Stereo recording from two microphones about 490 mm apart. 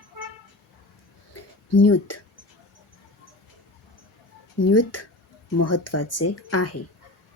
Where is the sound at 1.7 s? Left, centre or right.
Left.